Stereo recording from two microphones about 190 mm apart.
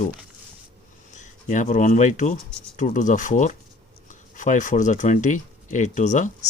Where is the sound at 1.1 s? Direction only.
40° left (ahead or behind).